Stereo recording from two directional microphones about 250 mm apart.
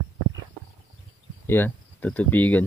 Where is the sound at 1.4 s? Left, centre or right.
Centre.